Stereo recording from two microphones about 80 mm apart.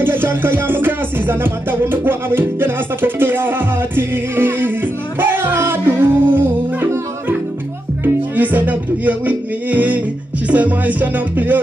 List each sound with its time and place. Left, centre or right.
0.0 s music: right
8.0 s music: right